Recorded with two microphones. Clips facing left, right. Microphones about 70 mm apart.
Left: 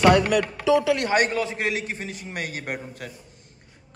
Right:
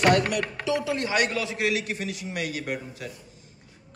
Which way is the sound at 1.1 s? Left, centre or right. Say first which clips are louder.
Left 4 dB; left.